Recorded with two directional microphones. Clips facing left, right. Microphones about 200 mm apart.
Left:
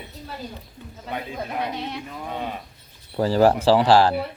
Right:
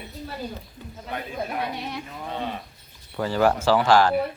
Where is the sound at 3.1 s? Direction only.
35° left (ahead or behind).